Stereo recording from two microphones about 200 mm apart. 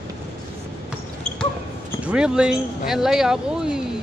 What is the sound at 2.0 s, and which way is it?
Speech, 5° right (ahead or behind).